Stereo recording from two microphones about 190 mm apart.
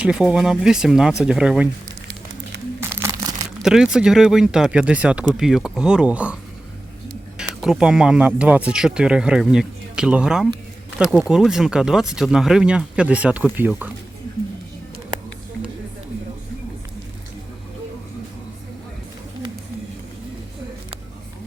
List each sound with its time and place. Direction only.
0.0 s speech: 5° right (ahead or behind)
3.0 s a sound: 15° right (ahead or behind)
3.6 s speech: 5° right (ahead or behind)
7.6 s speech: 5° right (ahead or behind)